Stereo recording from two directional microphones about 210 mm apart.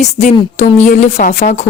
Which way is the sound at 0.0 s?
35° left (ahead or behind).